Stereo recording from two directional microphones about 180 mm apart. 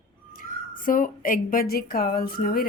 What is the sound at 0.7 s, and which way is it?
A woman's voice, 50° left (ahead or behind).